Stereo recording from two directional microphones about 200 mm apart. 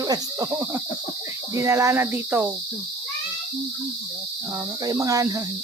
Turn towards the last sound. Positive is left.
turn(degrees=-15)  # may be behind; listen again after turning